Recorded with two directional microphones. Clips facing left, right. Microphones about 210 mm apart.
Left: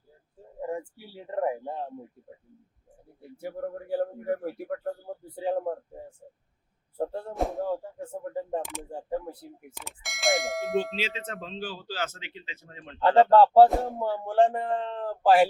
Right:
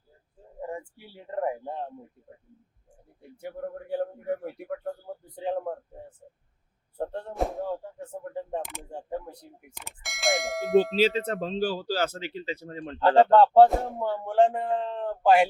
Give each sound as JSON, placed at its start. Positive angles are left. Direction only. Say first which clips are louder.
{"t": 1.4, "sound": "speech", "louder": "left 1 dB", "side_deg": 5}
{"t": 3.8, "sound": "speech", "louder": "left 1 dB", "side_deg": 5}
{"t": 11.0, "sound": "speech", "louder": "right 10 dB", "side_deg": -40}
{"t": 13.0, "sound": "speech", "louder": "even", "side_deg": 5}